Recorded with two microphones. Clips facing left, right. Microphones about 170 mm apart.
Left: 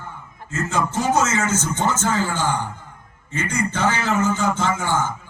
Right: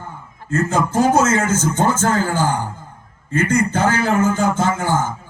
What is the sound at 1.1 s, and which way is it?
A man's voice, 55° right (ahead or behind).